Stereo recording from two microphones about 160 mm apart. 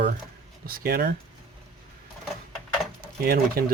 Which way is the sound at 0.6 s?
65° right (ahead or behind).